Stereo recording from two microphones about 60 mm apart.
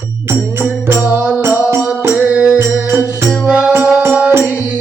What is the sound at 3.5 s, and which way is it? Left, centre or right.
Music, centre.